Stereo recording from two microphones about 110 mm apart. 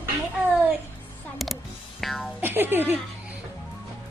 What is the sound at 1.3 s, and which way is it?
Music, centre (ahead or behind).